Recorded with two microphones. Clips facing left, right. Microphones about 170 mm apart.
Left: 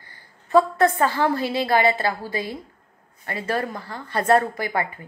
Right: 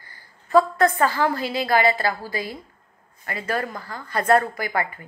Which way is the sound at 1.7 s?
25° left (ahead or behind).